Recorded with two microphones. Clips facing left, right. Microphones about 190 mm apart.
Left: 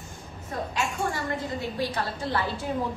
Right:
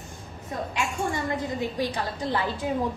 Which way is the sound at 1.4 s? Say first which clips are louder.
Right 2 dB; 15° right (ahead or behind).